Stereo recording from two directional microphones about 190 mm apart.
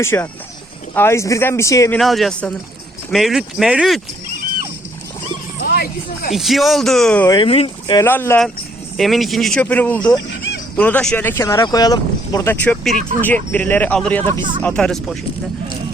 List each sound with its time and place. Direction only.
0.0 s speech: 10° left (ahead or behind)
2.0 s speech: centre (ahead or behind)
5.6 s speech: 55° left (ahead or behind)
6.3 s speech: centre (ahead or behind)
7.3 s speech: 25° left (ahead or behind)
8.0 s speech: 10° left (ahead or behind)
9.0 s speech: centre (ahead or behind)
10.2 s a sound: 70° left (ahead or behind)
10.8 s speech: 5° left (ahead or behind)